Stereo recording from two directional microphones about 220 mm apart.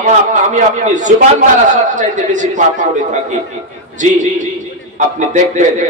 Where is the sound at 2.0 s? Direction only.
35° right (ahead or behind).